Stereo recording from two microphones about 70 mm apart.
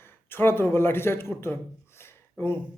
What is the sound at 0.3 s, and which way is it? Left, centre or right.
A man's voice, left.